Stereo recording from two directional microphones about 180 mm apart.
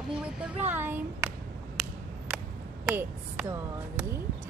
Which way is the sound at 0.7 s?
10° right (ahead or behind).